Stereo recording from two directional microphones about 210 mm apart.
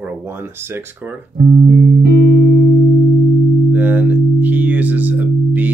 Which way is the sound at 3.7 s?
5° right (ahead or behind).